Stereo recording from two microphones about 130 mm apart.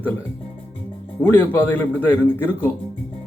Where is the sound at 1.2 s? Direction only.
15° left (ahead or behind).